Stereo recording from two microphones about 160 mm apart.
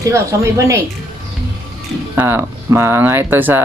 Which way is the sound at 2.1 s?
15° right (ahead or behind).